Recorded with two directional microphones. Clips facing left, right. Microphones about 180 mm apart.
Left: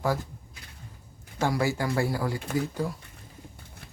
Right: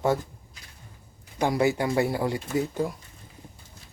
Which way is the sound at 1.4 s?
20° right (ahead or behind).